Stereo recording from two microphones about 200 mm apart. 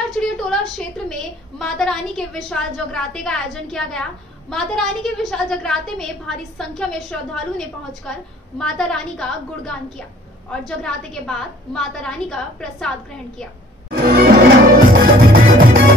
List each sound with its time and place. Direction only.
0.2 s a sound: 5° left (ahead or behind)
1.6 s a woman's voice: 5° left (ahead or behind)
13.8 s music: 45° right (ahead or behind)